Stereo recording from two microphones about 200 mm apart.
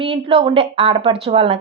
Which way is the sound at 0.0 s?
30° right (ahead or behind).